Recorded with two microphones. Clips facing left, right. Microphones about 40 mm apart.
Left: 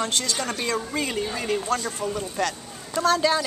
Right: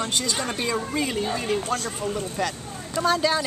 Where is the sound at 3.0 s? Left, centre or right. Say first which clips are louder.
Left 1 dB; centre.